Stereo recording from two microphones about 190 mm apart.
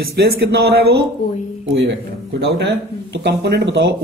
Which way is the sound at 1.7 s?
70° right (ahead or behind).